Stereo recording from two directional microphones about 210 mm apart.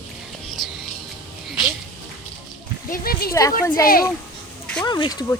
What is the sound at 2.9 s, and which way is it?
Speech, 45° left (ahead or behind).